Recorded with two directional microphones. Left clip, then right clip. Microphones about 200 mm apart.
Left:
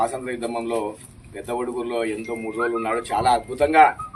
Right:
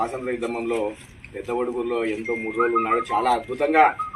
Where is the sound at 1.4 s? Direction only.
15° left (ahead or behind).